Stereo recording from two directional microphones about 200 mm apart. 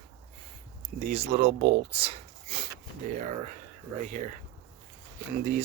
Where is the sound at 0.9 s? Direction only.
30° right (ahead or behind).